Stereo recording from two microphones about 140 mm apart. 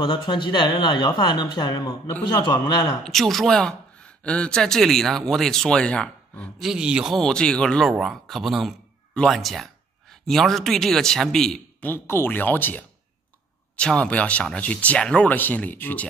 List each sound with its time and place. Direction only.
0.0 s a man's voice: 35° left (ahead or behind)
3.0 s speech: centre (ahead or behind)
6.6 s speech: 5° right (ahead or behind)
11.9 s speech: 15° left (ahead or behind)